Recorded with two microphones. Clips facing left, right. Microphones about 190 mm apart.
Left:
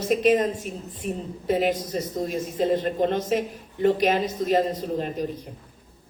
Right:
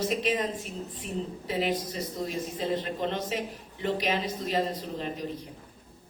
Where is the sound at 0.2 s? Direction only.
45° left (ahead or behind).